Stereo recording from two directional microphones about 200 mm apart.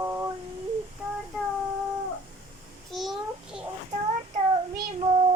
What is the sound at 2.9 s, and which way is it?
Child singing, centre (ahead or behind).